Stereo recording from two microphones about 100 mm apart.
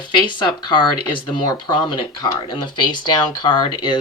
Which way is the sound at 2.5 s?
50° left (ahead or behind).